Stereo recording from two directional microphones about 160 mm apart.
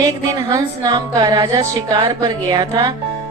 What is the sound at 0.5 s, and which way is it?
A woman's voice, 25° right (ahead or behind).